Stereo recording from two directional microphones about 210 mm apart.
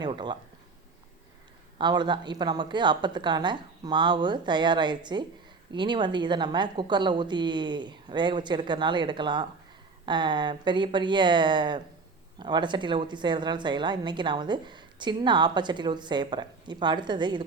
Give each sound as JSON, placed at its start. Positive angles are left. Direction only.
{"t": 0.0, "sound": "a woman's voice", "side_deg": -20}
{"t": 1.8, "sound": "a woman's voice", "side_deg": -20}